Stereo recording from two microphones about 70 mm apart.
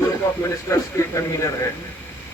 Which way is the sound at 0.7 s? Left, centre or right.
Left.